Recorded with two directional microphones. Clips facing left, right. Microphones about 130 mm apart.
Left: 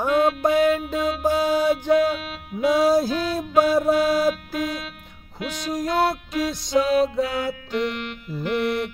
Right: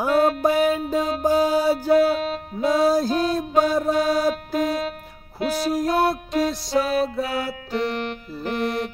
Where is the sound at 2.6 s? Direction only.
Centre (ahead or behind).